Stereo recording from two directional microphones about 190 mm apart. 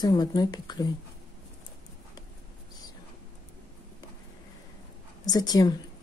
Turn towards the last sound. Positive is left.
turn(degrees=20)  # may be behind; listen again after turning